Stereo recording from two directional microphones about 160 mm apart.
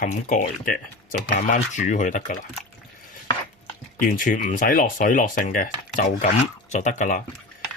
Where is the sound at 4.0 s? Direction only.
60° left (ahead or behind).